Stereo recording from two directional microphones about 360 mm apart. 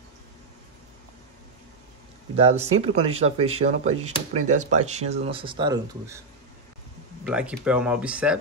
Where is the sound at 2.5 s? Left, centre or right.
Right.